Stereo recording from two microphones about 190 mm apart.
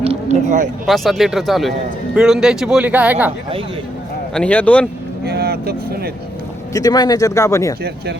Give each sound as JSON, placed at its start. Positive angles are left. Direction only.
{"t": 0.0, "sound": "a sound", "side_deg": -35}
{"t": 0.9, "sound": "speech", "side_deg": 0}
{"t": 4.4, "sound": "speech", "side_deg": 5}
{"t": 5.2, "sound": "speech", "side_deg": -55}
{"t": 6.7, "sound": "speech", "side_deg": 20}